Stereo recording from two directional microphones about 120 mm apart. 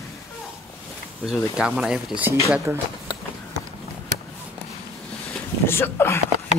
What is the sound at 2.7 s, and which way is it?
Speech, 20° right (ahead or behind).